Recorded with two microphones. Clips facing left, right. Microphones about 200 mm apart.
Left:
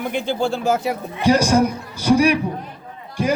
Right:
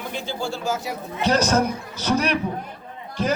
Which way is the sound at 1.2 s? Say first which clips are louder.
Left 4 dB; 10° left (ahead or behind).